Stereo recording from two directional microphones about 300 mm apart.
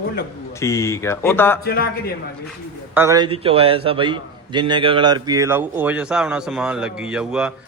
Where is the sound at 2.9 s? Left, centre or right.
Centre.